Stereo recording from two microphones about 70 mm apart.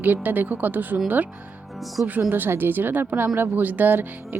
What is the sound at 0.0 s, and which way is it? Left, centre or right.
Speech, right.